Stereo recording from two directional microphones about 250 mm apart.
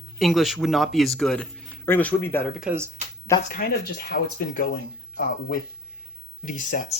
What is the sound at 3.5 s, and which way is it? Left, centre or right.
Speech, left.